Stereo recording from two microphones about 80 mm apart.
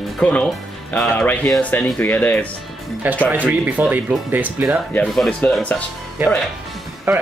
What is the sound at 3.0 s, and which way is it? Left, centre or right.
Speech, right.